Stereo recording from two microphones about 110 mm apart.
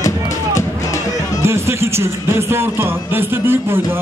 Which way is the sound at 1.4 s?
25° right (ahead or behind).